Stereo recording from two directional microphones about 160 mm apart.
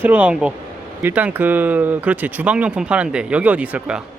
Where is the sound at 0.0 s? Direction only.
10° right (ahead or behind).